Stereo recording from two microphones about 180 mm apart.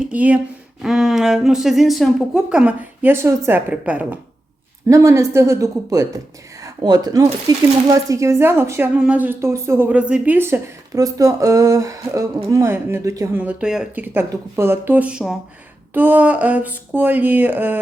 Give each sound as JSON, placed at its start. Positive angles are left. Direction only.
{"t": 0.0, "sound": "speech", "side_deg": -10}